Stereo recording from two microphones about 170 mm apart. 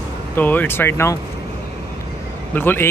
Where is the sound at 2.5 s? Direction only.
10° left (ahead or behind).